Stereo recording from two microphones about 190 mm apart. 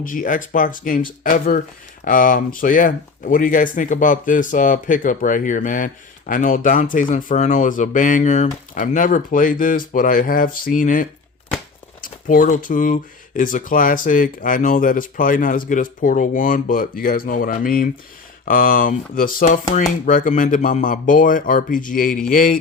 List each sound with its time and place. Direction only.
0.0 s speech: 45° left (ahead or behind)